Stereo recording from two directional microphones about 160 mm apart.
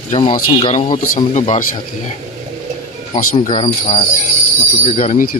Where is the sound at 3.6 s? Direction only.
40° left (ahead or behind).